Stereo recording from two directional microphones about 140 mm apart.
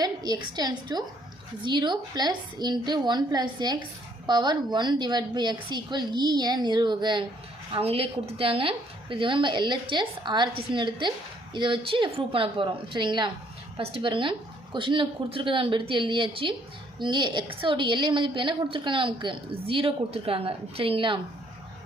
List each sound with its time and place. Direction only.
0.0 s a woman's voice: 30° right (ahead or behind)